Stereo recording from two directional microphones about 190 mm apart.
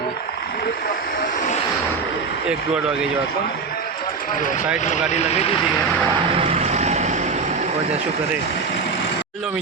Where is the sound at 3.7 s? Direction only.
50° left (ahead or behind).